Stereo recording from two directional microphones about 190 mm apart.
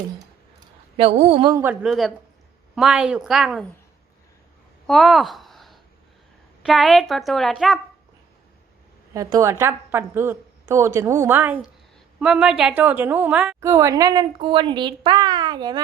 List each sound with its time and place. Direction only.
0.9 s a woman's voice: 35° right (ahead or behind)
1.5 s a woman's voice: 10° right (ahead or behind)
4.9 s a sound: centre (ahead or behind)
6.6 s a woman's voice: centre (ahead or behind)
9.1 s a woman's voice: 15° right (ahead or behind)
13.6 s a woman's voice: 15° right (ahead or behind)